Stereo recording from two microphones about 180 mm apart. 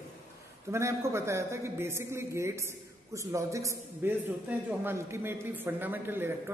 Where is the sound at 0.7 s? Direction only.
15° right (ahead or behind).